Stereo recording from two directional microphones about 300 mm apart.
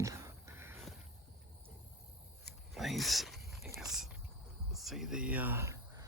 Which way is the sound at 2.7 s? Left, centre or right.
Centre.